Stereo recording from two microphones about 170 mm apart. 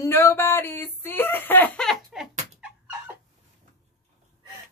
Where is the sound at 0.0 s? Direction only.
15° left (ahead or behind).